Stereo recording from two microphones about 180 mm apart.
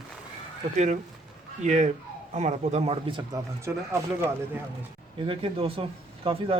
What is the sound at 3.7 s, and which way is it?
Speech, 10° right (ahead or behind).